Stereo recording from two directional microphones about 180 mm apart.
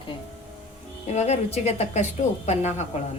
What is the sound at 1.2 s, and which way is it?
A woman's voice, 35° left (ahead or behind).